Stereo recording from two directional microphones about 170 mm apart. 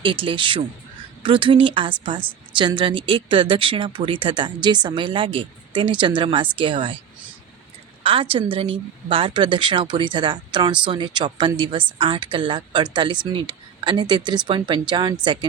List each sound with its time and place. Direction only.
0.0 s a woman's voice: 30° right (ahead or behind)
8.0 s a woman's voice: 30° right (ahead or behind)